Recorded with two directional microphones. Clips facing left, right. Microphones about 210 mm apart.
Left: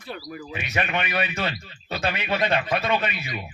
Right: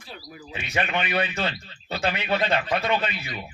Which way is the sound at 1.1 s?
10° left (ahead or behind).